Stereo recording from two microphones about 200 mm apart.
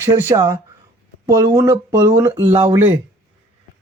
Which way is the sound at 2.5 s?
25° right (ahead or behind).